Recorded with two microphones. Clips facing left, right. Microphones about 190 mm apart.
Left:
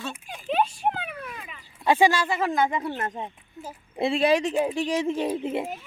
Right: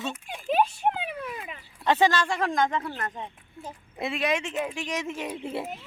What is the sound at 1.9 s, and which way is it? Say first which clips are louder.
Speech: left 2 dB; 10° left (ahead or behind).